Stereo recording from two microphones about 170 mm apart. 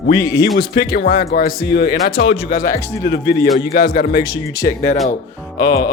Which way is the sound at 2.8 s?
15° left (ahead or behind).